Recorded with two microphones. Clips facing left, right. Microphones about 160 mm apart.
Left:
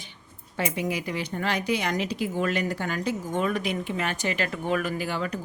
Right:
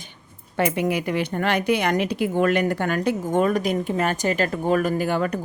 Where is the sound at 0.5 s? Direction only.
60° right (ahead or behind).